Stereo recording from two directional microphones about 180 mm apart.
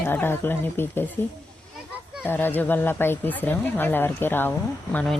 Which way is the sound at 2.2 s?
10° left (ahead or behind).